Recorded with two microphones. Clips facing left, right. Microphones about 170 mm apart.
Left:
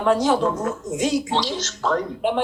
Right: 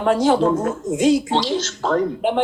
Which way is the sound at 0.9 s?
30° right (ahead or behind).